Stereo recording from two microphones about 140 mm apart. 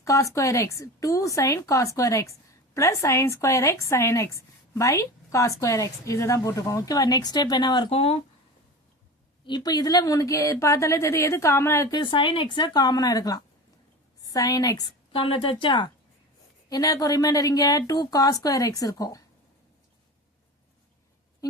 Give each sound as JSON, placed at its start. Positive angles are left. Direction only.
{"t": 0.0, "sound": "a woman's voice", "side_deg": 20}
{"t": 7.9, "sound": "speech", "side_deg": 45}
{"t": 9.5, "sound": "a woman's voice", "side_deg": 30}
{"t": 11.9, "sound": "a woman's voice", "side_deg": 35}
{"t": 15.1, "sound": "a woman's voice", "side_deg": 40}